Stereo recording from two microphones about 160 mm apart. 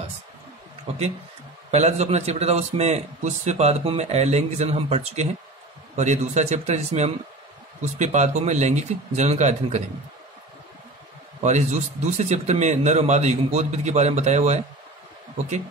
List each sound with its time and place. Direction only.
0.9 s a man's voice: 45° right (ahead or behind)
11.4 s a man's voice: 50° right (ahead or behind)